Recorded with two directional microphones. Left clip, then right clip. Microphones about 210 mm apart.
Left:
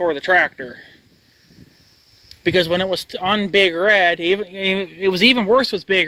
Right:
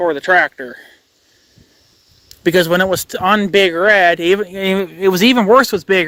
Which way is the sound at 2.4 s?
35° right (ahead or behind).